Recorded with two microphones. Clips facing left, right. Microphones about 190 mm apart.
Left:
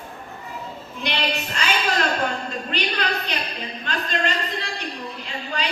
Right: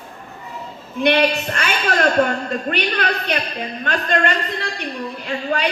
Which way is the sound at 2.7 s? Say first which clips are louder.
Right 2 dB; 60° right (ahead or behind).